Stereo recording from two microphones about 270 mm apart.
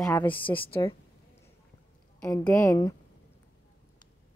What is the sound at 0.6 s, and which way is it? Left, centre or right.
Speech, centre.